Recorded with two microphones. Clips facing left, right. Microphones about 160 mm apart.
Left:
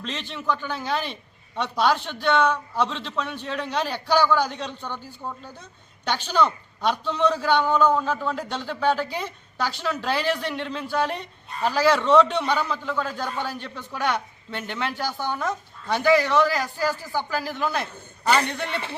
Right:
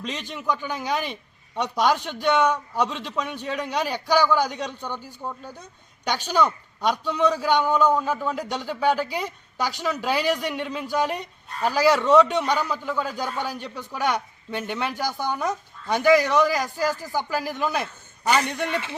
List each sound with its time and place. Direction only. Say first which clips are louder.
0.0 s a man's voice: even; 15° right (ahead or behind)